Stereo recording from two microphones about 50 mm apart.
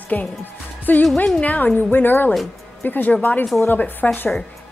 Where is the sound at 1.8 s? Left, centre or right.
Left.